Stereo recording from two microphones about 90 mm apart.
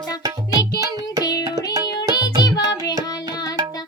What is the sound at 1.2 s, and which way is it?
Music, 45° left (ahead or behind).